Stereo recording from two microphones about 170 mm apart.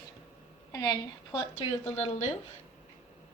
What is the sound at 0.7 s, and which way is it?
Speech, 20° left (ahead or behind).